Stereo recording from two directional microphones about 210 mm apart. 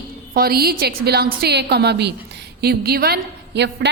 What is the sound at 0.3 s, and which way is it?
A woman's voice, 45° right (ahead or behind).